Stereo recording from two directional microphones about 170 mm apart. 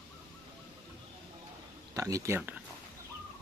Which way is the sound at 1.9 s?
20° right (ahead or behind).